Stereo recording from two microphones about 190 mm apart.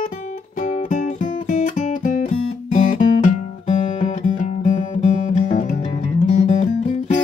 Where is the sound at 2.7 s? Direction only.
45° left (ahead or behind).